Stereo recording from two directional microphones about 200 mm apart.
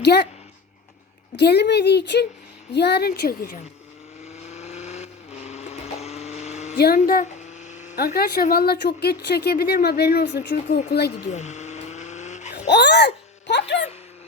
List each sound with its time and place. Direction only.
0.0 s speech: 55° left (ahead or behind)
1.4 s speech: 55° left (ahead or behind)
4.4 s vehicle: 35° left (ahead or behind)
6.7 s a sound: 50° left (ahead or behind)
7.9 s speech: 50° left (ahead or behind)
11.1 s vehicle: 35° left (ahead or behind)
12.5 s a sound: 60° left (ahead or behind)